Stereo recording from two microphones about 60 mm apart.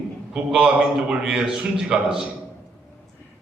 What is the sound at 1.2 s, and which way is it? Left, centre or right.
A man's voice, centre.